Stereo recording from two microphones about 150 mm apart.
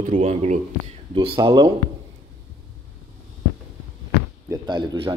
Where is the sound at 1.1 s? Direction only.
30° right (ahead or behind).